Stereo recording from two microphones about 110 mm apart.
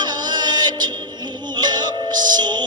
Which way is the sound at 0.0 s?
40° right (ahead or behind).